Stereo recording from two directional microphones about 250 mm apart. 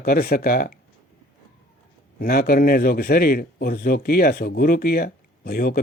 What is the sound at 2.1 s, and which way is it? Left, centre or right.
Speech, left.